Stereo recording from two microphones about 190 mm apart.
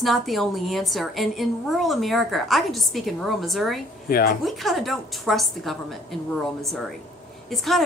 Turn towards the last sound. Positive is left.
turn(degrees=0)  # may be behind; listen again after turning